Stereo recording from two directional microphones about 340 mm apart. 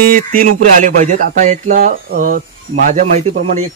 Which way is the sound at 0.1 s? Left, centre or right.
Right.